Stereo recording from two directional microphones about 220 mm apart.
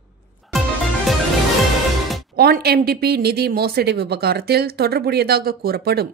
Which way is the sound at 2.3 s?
45° right (ahead or behind).